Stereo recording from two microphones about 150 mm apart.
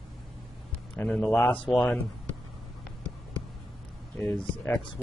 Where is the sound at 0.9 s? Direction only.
10° left (ahead or behind).